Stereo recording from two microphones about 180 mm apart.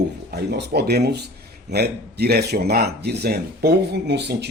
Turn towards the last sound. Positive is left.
turn(degrees=-70)  # may be behind; listen again after turning